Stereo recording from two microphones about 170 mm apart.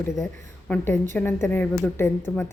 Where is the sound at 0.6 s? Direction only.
10° left (ahead or behind).